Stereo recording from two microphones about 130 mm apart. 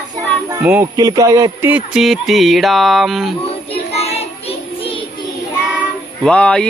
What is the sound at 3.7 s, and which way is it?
Child singing, 50° left (ahead or behind).